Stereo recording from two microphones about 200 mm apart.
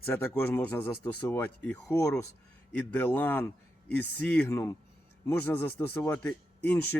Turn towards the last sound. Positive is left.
turn(degrees=10)  # may be behind; listen again after turning